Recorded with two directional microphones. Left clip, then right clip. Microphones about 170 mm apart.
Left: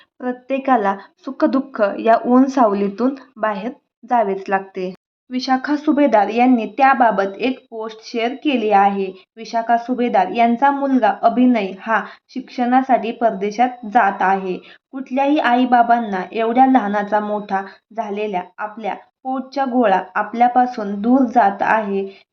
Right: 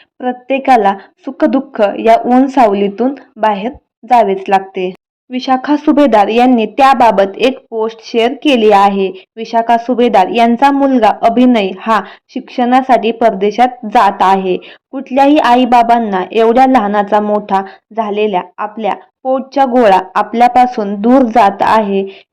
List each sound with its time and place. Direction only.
0.2 s speech: 20° right (ahead or behind)